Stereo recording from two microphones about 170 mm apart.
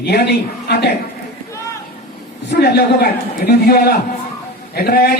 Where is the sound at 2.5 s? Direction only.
75° left (ahead or behind).